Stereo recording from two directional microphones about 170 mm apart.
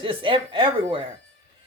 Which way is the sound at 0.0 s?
30° right (ahead or behind).